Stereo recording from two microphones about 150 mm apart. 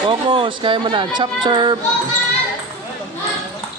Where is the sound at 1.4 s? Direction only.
30° right (ahead or behind).